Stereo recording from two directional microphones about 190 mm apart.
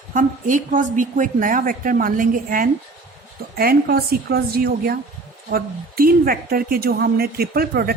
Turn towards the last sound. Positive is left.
turn(degrees=-55)  # may be behind; listen again after turning